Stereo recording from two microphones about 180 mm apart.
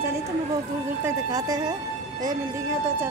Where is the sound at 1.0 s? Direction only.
20° right (ahead or behind).